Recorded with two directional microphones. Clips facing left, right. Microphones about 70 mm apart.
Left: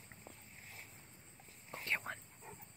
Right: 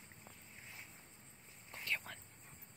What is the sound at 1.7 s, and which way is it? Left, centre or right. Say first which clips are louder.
Whispering: left 3 dB; left.